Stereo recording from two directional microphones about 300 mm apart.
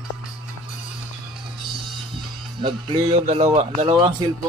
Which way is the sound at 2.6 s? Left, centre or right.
Centre.